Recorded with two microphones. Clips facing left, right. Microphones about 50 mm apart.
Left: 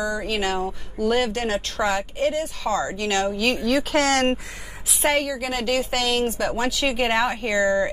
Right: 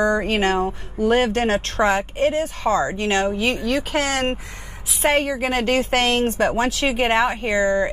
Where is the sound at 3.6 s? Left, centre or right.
Centre.